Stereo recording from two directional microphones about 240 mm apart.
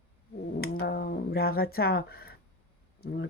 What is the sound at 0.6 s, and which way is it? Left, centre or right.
Speech, left.